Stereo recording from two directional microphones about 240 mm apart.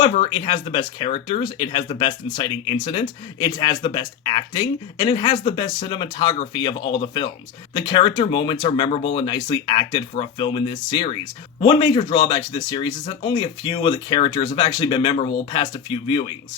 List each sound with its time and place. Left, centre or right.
0.0 s speech: left